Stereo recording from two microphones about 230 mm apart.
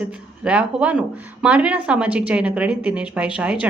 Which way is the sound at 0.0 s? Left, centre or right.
Centre.